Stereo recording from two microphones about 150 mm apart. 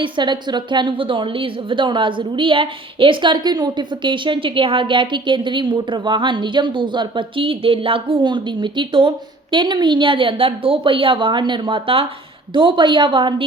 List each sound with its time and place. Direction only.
0.0 s a woman's voice: 30° right (ahead or behind)